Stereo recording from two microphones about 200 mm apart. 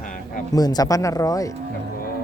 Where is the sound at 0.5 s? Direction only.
20° left (ahead or behind).